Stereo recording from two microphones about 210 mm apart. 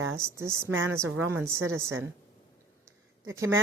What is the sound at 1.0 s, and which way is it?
Speech, 75° right (ahead or behind).